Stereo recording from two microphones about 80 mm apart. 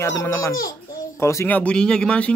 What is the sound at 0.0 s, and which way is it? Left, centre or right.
Speech, left.